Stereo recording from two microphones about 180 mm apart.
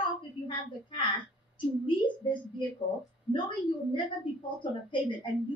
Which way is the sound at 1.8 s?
25° left (ahead or behind).